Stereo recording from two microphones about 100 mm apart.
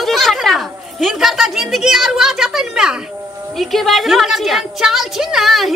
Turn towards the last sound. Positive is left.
turn(degrees=0)  # may be behind; listen again after turning